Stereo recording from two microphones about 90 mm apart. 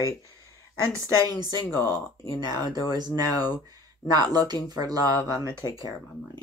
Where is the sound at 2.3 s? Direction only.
50° right (ahead or behind).